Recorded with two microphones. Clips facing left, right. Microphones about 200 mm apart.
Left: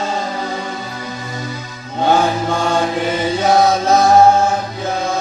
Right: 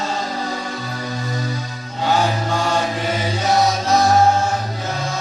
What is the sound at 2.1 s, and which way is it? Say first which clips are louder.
Mantra: left 2 dB; 55° left (ahead or behind).